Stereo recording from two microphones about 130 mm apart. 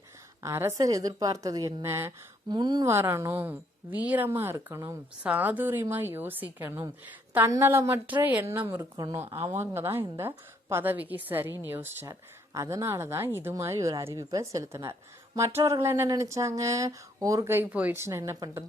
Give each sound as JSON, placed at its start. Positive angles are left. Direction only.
{"t": 0.4, "sound": "a woman's voice", "side_deg": -25}
{"t": 2.5, "sound": "speech", "side_deg": -35}
{"t": 2.9, "sound": "a woman's voice", "side_deg": -20}
{"t": 5.2, "sound": "a woman's voice", "side_deg": -10}